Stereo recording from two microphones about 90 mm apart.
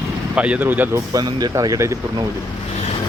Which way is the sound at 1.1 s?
40° right (ahead or behind).